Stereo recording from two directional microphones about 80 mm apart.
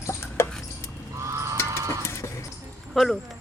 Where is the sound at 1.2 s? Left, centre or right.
Right.